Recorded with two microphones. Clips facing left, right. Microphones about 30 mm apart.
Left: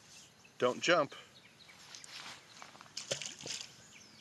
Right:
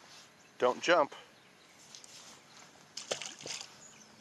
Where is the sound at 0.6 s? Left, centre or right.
Centre.